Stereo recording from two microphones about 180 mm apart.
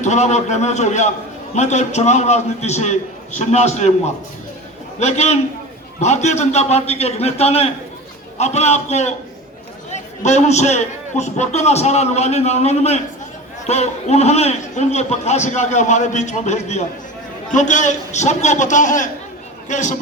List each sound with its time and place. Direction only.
0.0 s a man's voice: 40° left (ahead or behind)